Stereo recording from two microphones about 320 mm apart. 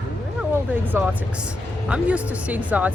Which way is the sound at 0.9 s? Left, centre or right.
Centre.